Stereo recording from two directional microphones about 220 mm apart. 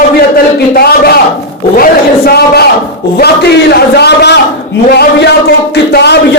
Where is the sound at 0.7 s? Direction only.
45° left (ahead or behind).